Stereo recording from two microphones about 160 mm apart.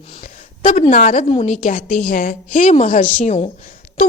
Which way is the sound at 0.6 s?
45° left (ahead or behind).